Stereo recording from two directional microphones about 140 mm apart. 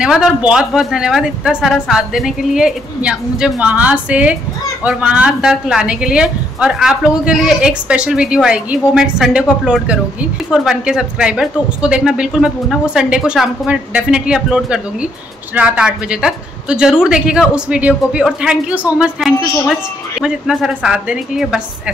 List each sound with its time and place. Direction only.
0.0 s a woman's voice: 5° right (ahead or behind)